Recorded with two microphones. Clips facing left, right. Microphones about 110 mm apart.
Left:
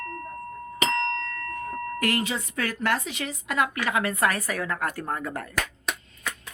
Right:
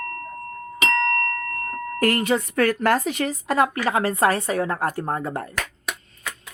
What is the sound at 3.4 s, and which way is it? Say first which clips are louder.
Speech: right 5 dB; 35° right (ahead or behind).